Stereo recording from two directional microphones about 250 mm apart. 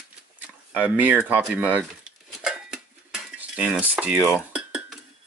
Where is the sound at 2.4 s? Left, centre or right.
Centre.